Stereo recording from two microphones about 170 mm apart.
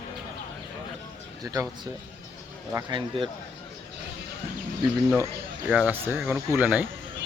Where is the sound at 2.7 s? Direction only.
30° right (ahead or behind).